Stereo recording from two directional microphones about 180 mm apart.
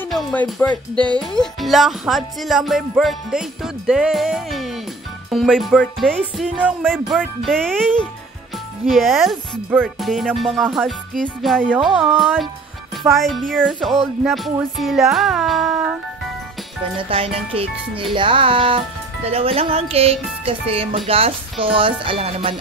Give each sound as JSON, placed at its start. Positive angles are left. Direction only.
{"t": 0.1, "sound": "speech", "side_deg": 5}
{"t": 0.9, "sound": "speech", "side_deg": -25}
{"t": 1.2, "sound": "speech", "side_deg": 0}
{"t": 17.1, "sound": "speech", "side_deg": -30}
{"t": 19.2, "sound": "music", "side_deg": -30}